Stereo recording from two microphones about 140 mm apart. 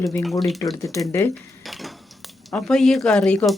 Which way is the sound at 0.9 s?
20° left (ahead or behind).